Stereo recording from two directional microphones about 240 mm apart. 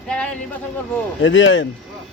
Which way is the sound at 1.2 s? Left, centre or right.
Left.